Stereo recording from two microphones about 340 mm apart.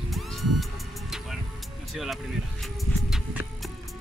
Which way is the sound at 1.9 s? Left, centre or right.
Centre.